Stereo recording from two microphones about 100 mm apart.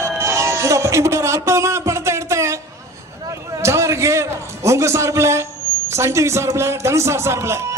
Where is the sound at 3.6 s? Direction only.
30° right (ahead or behind).